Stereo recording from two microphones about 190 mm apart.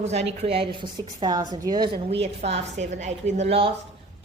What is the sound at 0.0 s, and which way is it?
A woman's voice, 35° right (ahead or behind).